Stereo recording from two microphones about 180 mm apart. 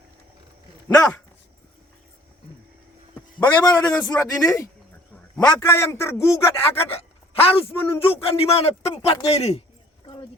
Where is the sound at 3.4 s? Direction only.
20° left (ahead or behind).